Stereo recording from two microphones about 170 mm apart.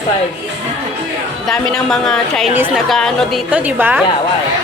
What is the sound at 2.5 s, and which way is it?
Speech, 10° right (ahead or behind).